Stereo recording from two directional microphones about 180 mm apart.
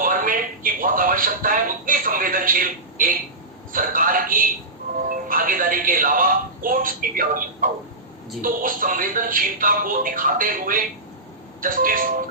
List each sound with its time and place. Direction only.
0.0 s a sound: 50° right (ahead or behind)
5.0 s music: 50° right (ahead or behind)
8.4 s speech: 50° right (ahead or behind)